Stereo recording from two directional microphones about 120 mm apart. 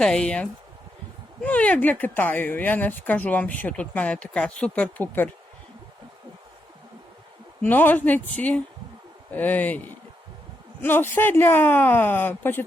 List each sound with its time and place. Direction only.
0.0 s speech: 10° left (ahead or behind)
7.6 s speech: 15° left (ahead or behind)